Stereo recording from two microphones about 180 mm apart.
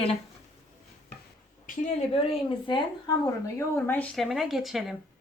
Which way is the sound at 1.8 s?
35° left (ahead or behind).